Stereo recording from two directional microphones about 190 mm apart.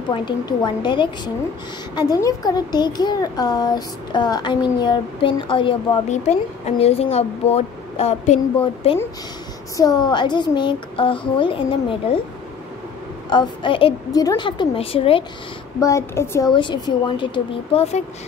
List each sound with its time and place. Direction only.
0.1 s a woman's voice: 25° left (ahead or behind)
9.8 s a woman's voice: 20° left (ahead or behind)
13.3 s a woman's voice: 25° left (ahead or behind)
15.8 s a woman's voice: 15° left (ahead or behind)